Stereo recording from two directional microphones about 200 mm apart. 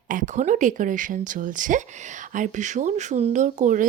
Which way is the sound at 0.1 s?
40° right (ahead or behind).